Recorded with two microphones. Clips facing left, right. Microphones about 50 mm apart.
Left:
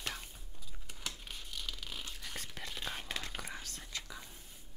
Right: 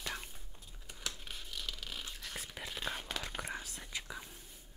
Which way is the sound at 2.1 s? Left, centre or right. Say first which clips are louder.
Even; centre.